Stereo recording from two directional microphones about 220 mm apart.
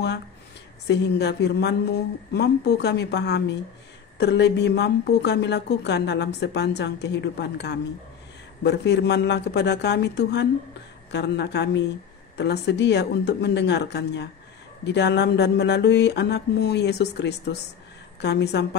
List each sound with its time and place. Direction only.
0.8 s a woman's voice: 50° left (ahead or behind)